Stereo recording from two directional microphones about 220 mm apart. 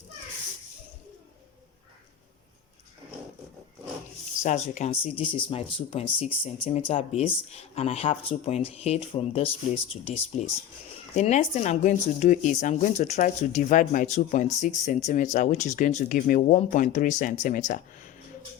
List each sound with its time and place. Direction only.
4.4 s speech: 30° left (ahead or behind)